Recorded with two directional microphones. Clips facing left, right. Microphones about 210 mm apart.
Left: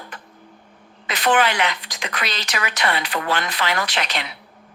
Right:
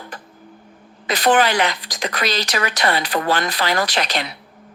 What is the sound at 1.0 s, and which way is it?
A woman's voice, 35° right (ahead or behind).